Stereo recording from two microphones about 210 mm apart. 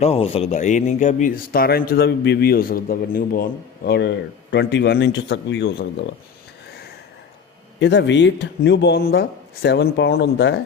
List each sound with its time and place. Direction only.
0.0 s speech: 30° left (ahead or behind); by 3.4 s 45° left (ahead or behind)
3.8 s speech: 55° left (ahead or behind)
7.8 s speech: 55° left (ahead or behind)